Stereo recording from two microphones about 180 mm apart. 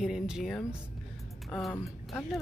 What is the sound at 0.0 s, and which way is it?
Speech, centre (ahead or behind).